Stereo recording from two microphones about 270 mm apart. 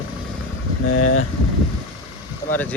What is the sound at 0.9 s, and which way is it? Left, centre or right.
Speech, left.